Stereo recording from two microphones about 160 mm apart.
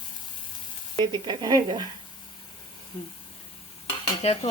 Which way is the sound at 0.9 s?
25° right (ahead or behind).